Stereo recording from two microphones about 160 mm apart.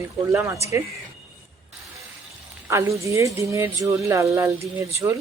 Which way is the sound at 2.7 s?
20° right (ahead or behind).